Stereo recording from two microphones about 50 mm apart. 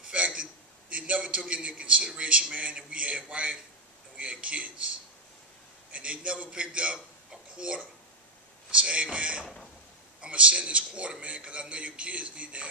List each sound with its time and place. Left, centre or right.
0.1 s a sound: right
2.0 s a man's voice: right
5.9 s a man's voice: right